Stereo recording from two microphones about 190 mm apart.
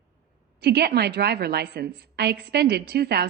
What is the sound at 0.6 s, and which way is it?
A woman's voice, 60° right (ahead or behind).